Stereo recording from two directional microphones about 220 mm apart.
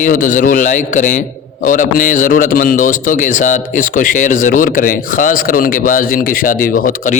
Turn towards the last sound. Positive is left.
turn(degrees=35)  # may be behind; listen again after turning